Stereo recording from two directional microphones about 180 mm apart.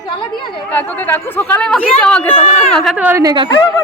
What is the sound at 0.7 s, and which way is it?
Speech, 10° left (ahead or behind).